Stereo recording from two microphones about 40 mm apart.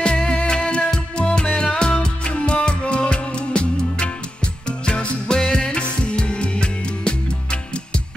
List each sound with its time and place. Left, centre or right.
0.0 s music: left